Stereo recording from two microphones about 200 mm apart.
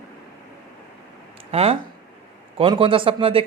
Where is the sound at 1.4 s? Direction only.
30° right (ahead or behind).